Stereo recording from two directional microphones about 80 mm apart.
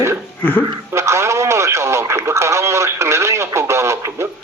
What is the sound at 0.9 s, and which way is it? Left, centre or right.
Speech, right.